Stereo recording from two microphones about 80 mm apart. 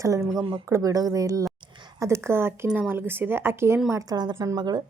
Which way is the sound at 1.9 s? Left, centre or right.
Right.